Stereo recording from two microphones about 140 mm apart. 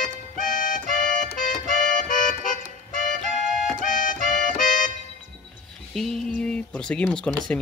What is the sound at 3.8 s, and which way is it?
Accordion, 70° left (ahead or behind).